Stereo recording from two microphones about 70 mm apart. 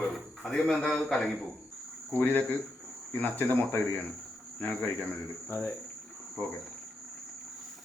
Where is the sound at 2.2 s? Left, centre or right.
Left.